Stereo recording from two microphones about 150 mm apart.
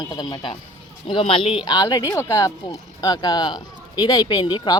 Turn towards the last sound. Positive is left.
turn(degrees=30)  # may be behind; listen again after turning